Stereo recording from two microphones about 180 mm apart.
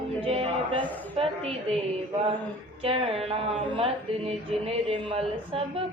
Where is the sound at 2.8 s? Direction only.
30° right (ahead or behind).